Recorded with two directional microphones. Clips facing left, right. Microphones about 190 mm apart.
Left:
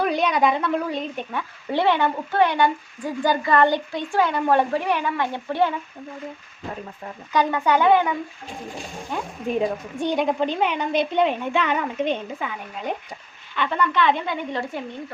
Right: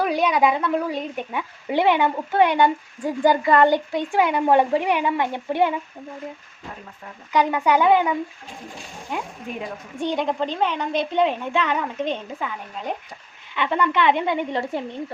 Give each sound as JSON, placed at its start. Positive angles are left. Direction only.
{"t": 0.0, "sound": "a woman's voice", "side_deg": -5}
{"t": 7.3, "sound": "a woman's voice", "side_deg": -15}
{"t": 10.1, "sound": "a woman's voice", "side_deg": 5}
{"t": 13.6, "sound": "speech", "side_deg": -20}